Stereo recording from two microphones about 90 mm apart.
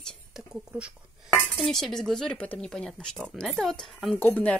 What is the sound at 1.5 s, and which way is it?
Speech, 5° left (ahead or behind).